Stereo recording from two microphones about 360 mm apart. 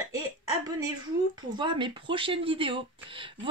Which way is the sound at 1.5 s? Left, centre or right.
Centre.